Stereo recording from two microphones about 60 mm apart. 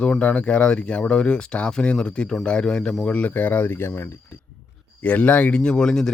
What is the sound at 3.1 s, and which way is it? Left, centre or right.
Speech, left.